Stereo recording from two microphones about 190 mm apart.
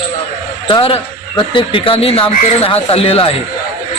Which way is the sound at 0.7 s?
25° left (ahead or behind).